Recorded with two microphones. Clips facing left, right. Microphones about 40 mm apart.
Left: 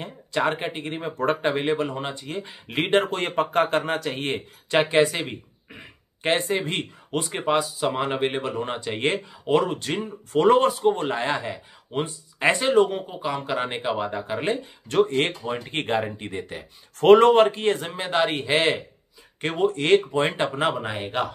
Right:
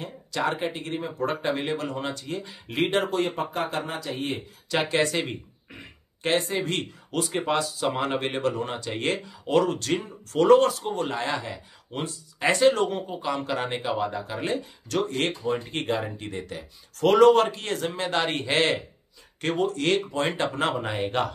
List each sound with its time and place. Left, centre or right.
0.0 s speech: left
1.1 s speech: left
3.0 s speech: left
4.6 s speech: left
4.9 s speech: centre
6.2 s speech: left
7.4 s speech: centre
12.6 s speech: centre
17.8 s speech: centre
19.4 s speech: left
20.5 s speech: centre